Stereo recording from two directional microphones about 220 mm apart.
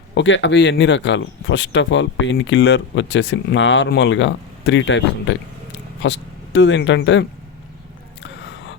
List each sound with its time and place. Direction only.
0.1 s speech: 55° left (ahead or behind)